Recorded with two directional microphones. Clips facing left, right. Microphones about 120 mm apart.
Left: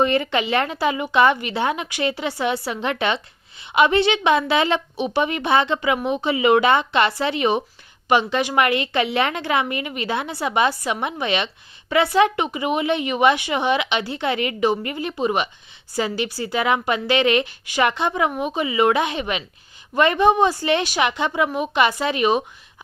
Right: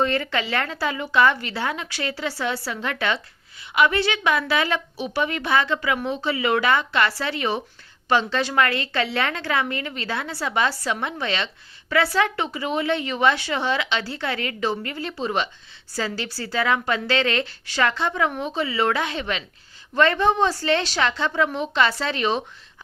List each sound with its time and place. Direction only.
0.0 s a woman's voice: 20° left (ahead or behind)